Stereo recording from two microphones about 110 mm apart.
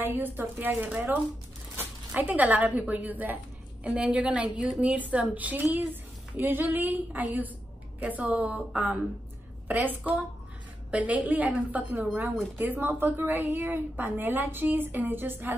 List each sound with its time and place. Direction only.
0.0 s a woman's voice: 20° right (ahead or behind)
10.9 s a woman's voice: 10° right (ahead or behind)
12.1 s speech: 5° right (ahead or behind)
12.5 s a woman's voice: 15° right (ahead or behind)